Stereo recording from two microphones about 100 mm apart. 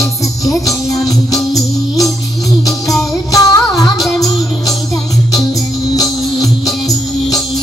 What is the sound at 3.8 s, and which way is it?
Music, 5° left (ahead or behind).